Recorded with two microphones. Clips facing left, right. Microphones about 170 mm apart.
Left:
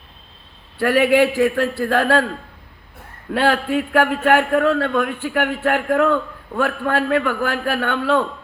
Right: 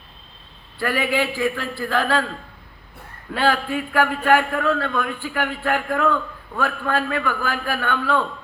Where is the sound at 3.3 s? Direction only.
70° left (ahead or behind).